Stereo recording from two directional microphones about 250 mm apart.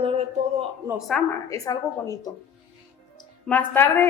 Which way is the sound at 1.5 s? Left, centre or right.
Centre.